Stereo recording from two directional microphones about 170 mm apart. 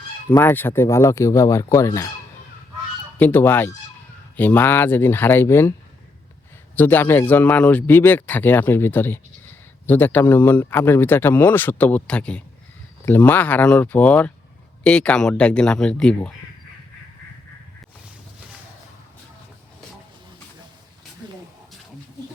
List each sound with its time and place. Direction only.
0.3 s a man's voice: 10° left (ahead or behind)
3.2 s a man's voice: 10° left (ahead or behind)
6.7 s a man's voice: 10° left (ahead or behind)